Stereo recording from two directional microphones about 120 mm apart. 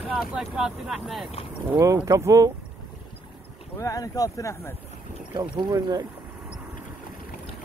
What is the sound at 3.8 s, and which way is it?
Speech, 30° left (ahead or behind).